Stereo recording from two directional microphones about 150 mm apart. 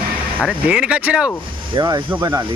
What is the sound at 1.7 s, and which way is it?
Speech, 30° right (ahead or behind).